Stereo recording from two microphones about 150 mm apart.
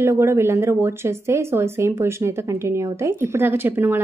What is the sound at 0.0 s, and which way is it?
A woman's voice, 15° right (ahead or behind).